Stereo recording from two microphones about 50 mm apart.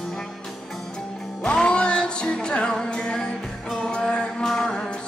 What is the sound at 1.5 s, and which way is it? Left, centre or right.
Music, centre.